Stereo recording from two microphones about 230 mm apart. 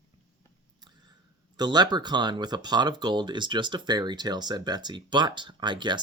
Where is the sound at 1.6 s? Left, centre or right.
Centre.